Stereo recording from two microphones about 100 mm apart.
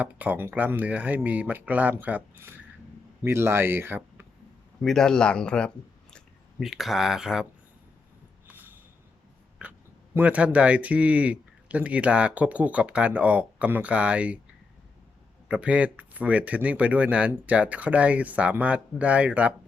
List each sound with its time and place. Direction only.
0.0 s speech: 15° right (ahead or behind)
4.8 s speech: 5° left (ahead or behind)
6.6 s speech: 5° right (ahead or behind)
8.4 s a sound: 20° right (ahead or behind)
10.2 s speech: 15° right (ahead or behind)
15.4 s speech: 10° right (ahead or behind)